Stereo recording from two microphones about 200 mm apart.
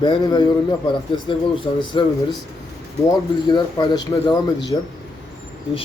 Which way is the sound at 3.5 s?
20° left (ahead or behind).